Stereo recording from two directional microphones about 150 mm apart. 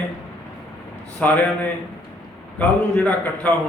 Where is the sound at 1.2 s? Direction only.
10° left (ahead or behind).